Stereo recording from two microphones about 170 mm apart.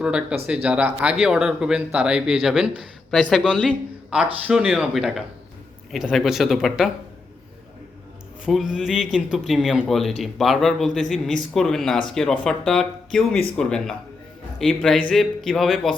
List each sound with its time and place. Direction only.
0.0 s speech: 5° right (ahead or behind)
8.4 s speech: centre (ahead or behind)